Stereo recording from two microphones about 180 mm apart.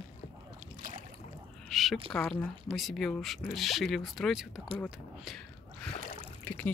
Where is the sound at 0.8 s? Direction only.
50° right (ahead or behind).